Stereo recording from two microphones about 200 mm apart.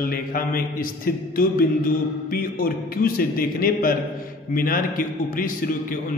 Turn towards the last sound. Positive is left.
turn(degrees=45)  # may be behind; listen again after turning